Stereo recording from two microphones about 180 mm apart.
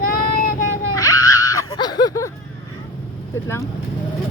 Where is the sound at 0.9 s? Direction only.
20° left (ahead or behind).